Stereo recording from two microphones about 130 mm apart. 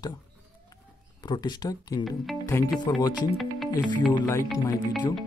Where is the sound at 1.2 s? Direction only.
35° left (ahead or behind).